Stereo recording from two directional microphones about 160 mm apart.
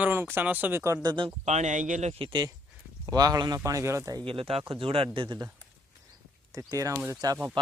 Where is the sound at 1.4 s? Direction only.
45° right (ahead or behind); by 4.2 s 20° right (ahead or behind).